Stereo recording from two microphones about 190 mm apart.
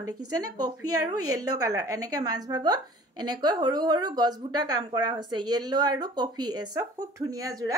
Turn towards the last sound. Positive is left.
turn(degrees=-20)  # may be behind; listen again after turning